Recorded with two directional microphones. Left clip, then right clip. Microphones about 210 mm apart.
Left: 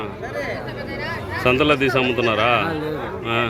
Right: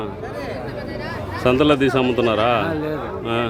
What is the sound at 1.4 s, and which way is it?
A man's voice, 20° right (ahead or behind).